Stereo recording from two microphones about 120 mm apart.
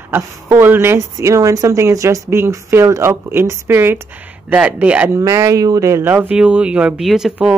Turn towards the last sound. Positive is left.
turn(degrees=-5)  # may be behind; listen again after turning